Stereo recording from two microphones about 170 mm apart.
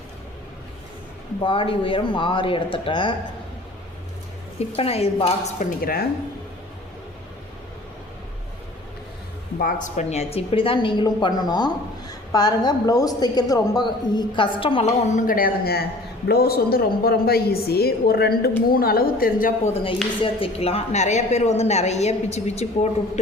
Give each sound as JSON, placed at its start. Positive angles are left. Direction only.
{"t": 1.4, "sound": "a woman's voice", "side_deg": 30}
{"t": 4.8, "sound": "a woman's voice", "side_deg": 35}
{"t": 9.6, "sound": "a woman's voice", "side_deg": 50}
{"t": 20.2, "sound": "a woman's voice", "side_deg": 35}